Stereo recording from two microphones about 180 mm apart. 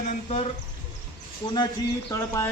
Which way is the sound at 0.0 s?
40° left (ahead or behind).